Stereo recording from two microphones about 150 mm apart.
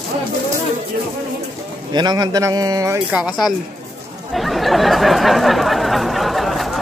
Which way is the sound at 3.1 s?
5° right (ahead or behind).